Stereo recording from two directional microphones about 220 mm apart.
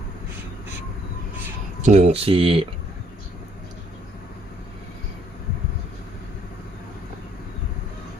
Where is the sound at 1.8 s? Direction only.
30° right (ahead or behind).